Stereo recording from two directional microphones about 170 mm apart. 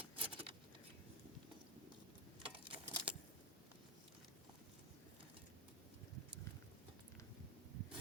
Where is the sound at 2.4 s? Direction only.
30° right (ahead or behind).